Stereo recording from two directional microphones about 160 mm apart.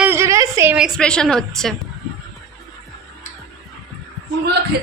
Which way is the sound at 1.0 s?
5° left (ahead or behind).